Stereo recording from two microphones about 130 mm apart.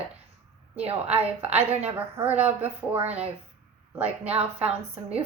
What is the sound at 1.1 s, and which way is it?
Speech, 15° right (ahead or behind).